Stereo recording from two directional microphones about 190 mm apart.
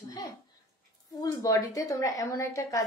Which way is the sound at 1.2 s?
20° left (ahead or behind).